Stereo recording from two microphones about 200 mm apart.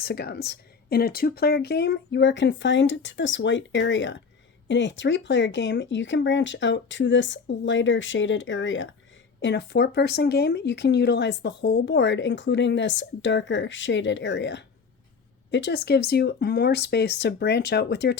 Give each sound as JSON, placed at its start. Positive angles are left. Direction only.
{"t": 0.0, "sound": "speech", "side_deg": 55}
{"t": 9.4, "sound": "speech", "side_deg": 60}